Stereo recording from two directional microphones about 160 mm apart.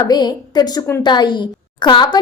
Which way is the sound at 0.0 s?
25° left (ahead or behind).